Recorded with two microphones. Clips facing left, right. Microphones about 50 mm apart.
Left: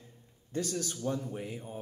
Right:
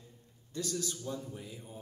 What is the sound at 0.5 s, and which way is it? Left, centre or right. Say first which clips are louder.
Speech: left 3 dB; left.